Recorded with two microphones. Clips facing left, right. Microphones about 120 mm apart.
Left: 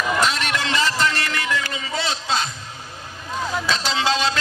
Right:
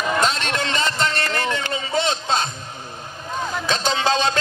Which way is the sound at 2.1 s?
45° right (ahead or behind).